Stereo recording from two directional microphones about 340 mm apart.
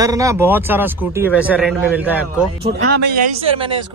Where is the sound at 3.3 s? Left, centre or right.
Centre.